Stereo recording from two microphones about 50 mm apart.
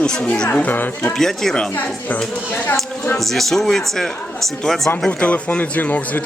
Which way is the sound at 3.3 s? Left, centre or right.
Centre.